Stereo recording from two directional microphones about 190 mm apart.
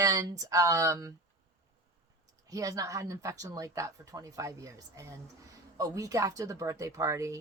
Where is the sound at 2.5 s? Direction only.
20° right (ahead or behind).